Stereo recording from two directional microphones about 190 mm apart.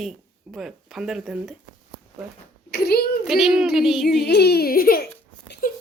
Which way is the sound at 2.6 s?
55° left (ahead or behind).